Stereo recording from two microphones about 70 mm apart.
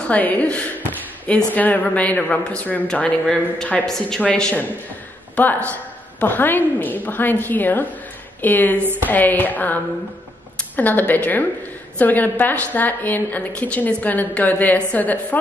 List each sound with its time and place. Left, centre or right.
0.0 s a woman's voice: left
5.3 s a woman's voice: left
8.7 s a woman's voice: right
9.0 s a woman's voice: left
10.8 s a woman's voice: left